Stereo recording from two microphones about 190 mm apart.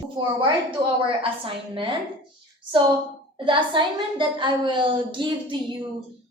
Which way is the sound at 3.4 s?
25° right (ahead or behind).